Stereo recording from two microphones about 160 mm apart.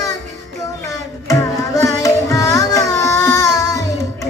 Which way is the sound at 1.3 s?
20° left (ahead or behind).